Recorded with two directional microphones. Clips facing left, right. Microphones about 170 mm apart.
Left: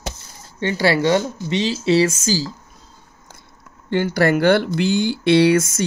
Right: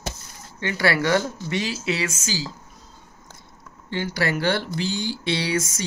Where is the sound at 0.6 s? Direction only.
30° left (ahead or behind).